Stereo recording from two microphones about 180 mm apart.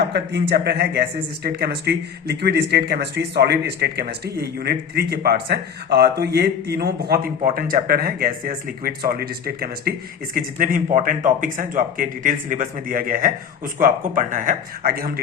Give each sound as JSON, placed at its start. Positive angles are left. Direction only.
{"t": 0.1, "sound": "a man's voice", "side_deg": -70}